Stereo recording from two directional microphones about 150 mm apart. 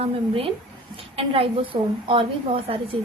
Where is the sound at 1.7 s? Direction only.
55° right (ahead or behind).